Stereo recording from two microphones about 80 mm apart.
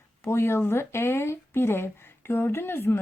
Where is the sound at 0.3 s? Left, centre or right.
Left.